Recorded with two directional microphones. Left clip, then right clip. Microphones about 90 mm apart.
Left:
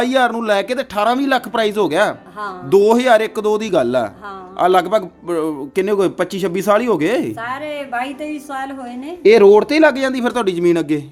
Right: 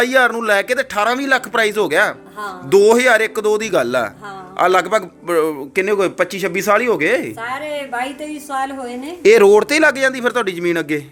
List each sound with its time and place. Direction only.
0.0 s a man's voice: 15° left (ahead or behind)
5.7 s speech: 40° left (ahead or behind)
7.4 s a woman's voice: 5° right (ahead or behind)
9.2 s speech: 15° right (ahead or behind)
9.8 s a woman's voice: centre (ahead or behind)
10.3 s speech: 20° left (ahead or behind)